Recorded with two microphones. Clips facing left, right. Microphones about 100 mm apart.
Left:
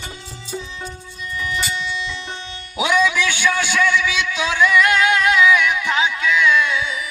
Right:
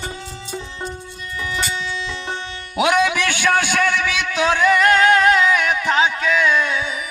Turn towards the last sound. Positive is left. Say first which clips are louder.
# left 1 dB
turn(degrees=-40)  # may be behind; listen again after turning